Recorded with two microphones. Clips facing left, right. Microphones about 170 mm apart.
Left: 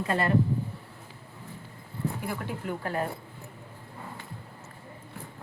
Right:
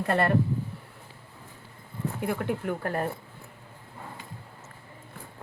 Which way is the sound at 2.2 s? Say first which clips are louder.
Right 5 dB; 55° right (ahead or behind).